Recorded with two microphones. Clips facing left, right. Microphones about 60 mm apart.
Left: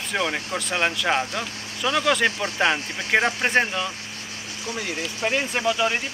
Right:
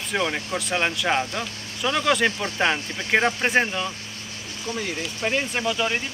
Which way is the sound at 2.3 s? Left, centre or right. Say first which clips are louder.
Left 1 dB; centre.